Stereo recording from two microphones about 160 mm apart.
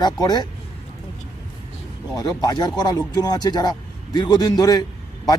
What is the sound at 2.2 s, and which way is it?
Speech, 20° left (ahead or behind).